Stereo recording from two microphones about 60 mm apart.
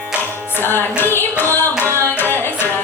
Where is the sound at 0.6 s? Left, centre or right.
Left.